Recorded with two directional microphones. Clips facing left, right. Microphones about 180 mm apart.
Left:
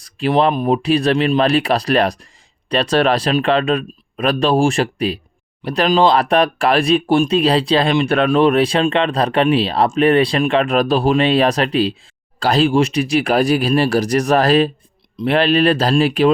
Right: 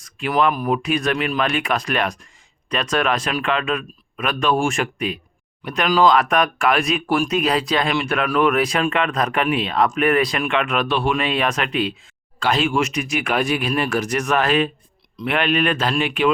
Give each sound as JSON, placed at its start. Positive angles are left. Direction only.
{"t": 0.0, "sound": "speech", "side_deg": 30}